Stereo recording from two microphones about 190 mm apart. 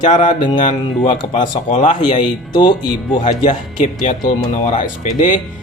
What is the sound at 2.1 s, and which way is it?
Speech, 25° left (ahead or behind).